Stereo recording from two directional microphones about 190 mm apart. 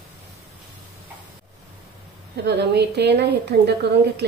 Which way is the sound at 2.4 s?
60° right (ahead or behind).